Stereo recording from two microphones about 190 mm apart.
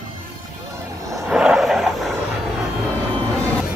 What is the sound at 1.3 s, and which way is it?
Vehicle, 5° right (ahead or behind).